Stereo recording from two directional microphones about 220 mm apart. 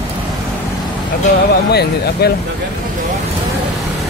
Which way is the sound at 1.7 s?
50° left (ahead or behind).